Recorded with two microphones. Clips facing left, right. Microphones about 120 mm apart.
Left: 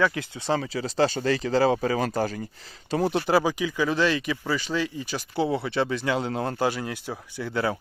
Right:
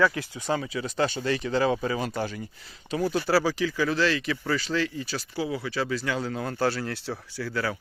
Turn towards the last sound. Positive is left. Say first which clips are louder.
# left 3 dB
turn(degrees=25)  # may be behind; listen again after turning